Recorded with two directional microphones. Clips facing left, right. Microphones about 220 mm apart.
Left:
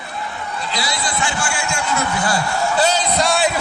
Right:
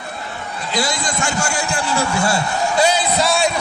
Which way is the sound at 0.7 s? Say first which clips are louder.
Right 4 dB; 50° right (ahead or behind).